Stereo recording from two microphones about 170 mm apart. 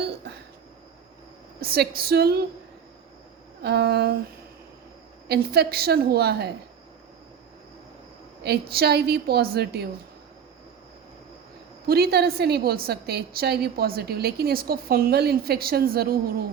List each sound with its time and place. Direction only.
1.6 s a woman's voice: 65° right (ahead or behind)
3.6 s a woman's voice: 75° right (ahead or behind)
5.3 s a woman's voice: 65° right (ahead or behind)
8.7 s a woman's voice: 70° right (ahead or behind)
11.9 s a woman's voice: 65° right (ahead or behind)